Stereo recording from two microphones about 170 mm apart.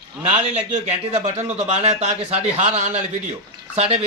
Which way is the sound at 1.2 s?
40° right (ahead or behind).